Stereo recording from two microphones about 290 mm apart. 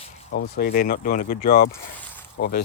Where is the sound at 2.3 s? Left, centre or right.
Left.